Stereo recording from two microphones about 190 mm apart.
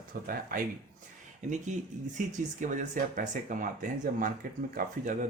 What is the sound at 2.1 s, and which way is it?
Speech, 40° right (ahead or behind).